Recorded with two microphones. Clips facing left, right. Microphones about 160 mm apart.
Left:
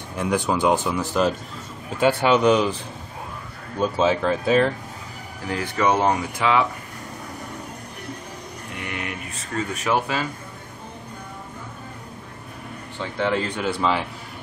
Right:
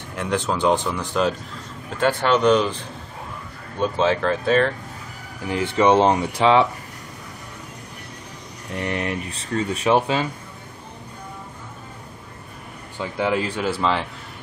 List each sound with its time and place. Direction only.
0.2 s speech: 10° left (ahead or behind)
3.8 s speech: 5° left (ahead or behind)
5.5 s speech: 25° right (ahead or behind)
8.7 s speech: 35° right (ahead or behind)
13.0 s speech: 10° right (ahead or behind)